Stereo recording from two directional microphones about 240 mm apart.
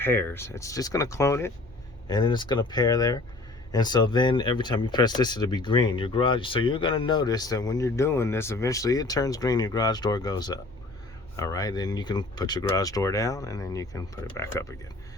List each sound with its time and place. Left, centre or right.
0.0 s speech: centre